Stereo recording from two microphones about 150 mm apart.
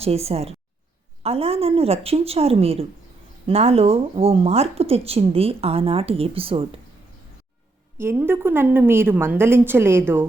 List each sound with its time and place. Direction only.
0.0 s a woman's voice: 40° right (ahead or behind)
7.9 s a woman's voice: 15° right (ahead or behind)